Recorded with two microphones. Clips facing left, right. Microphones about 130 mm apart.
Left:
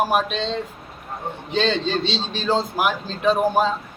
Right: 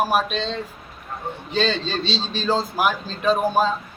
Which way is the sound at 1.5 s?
20° left (ahead or behind).